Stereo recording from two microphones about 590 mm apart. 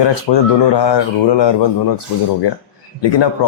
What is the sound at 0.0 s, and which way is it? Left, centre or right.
Speech, left.